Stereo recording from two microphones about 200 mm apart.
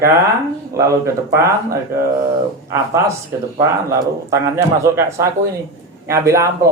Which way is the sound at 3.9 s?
15° right (ahead or behind).